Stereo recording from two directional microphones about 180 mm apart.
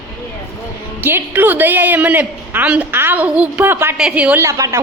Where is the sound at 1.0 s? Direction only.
10° right (ahead or behind).